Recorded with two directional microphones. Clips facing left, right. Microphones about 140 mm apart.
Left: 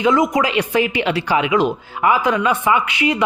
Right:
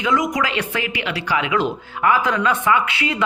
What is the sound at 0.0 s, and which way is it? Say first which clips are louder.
Speech: left 4 dB; 25° left (ahead or behind).